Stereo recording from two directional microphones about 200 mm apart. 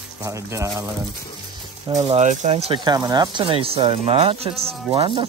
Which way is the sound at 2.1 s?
35° right (ahead or behind).